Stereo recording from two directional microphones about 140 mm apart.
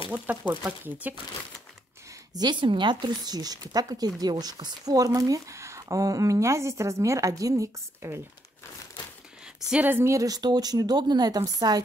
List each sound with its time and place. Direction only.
0.1 s speech: 10° right (ahead or behind)
2.3 s speech: 30° right (ahead or behind)
9.7 s speech: 10° right (ahead or behind); by 11.8 s 25° right (ahead or behind)